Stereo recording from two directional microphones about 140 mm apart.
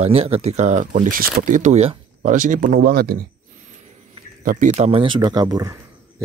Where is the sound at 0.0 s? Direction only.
45° right (ahead or behind).